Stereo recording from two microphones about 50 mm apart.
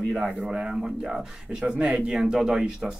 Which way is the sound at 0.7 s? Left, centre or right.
Centre.